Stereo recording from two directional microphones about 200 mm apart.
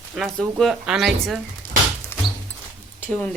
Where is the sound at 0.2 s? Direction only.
Centre (ahead or behind).